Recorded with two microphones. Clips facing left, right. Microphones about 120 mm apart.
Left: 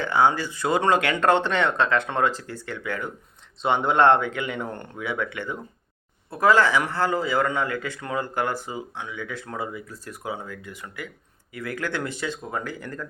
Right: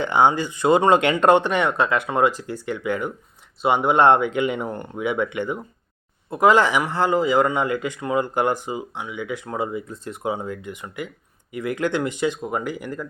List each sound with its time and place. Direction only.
0.0 s speech: 20° right (ahead or behind)